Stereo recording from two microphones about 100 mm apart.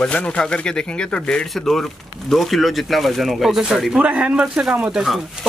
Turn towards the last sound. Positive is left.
turn(degrees=-5)  # may be behind; listen again after turning